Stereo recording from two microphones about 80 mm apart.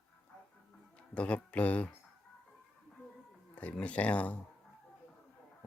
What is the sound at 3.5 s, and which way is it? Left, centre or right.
Speech, centre.